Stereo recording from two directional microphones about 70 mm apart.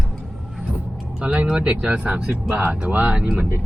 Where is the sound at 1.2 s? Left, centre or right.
Right.